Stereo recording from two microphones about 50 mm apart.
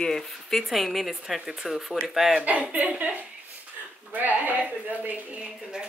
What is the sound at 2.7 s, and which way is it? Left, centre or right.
Speech, right.